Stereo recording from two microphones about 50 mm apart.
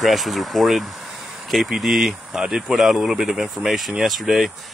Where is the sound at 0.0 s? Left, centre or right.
Centre.